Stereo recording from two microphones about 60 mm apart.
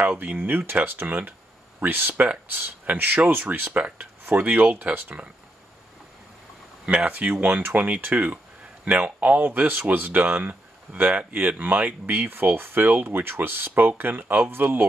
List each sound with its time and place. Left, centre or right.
0.0 s speech: right
7.1 s speech: right